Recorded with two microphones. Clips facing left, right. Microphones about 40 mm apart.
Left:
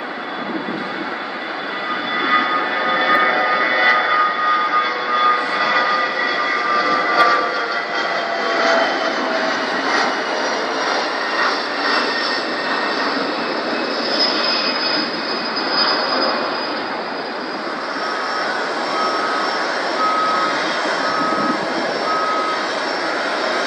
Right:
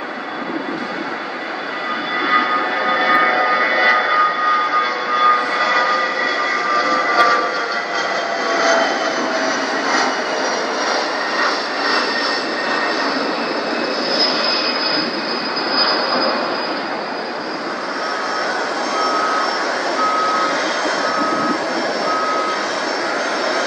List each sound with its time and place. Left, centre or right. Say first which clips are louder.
2.2 s vehicle: right 1 dB; centre
15.8 s vehicle: right 1 dB; centre
18.9 s vehicle: right 3 dB; centre